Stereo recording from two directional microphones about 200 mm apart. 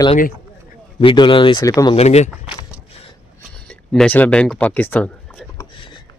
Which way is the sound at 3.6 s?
5° left (ahead or behind).